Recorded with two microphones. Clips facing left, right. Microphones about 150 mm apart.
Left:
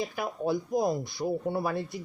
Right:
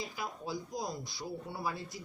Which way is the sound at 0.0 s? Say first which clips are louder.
Left 9 dB; 55° left (ahead or behind).